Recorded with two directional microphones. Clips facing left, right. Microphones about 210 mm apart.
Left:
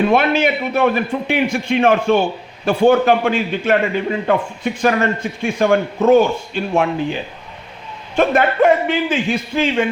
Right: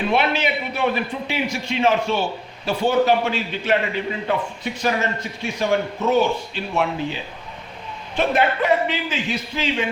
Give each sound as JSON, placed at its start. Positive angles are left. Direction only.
{"t": 0.1, "sound": "a man's voice", "side_deg": 50}